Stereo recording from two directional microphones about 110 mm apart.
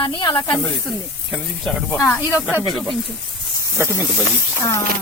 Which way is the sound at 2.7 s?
Centre (ahead or behind).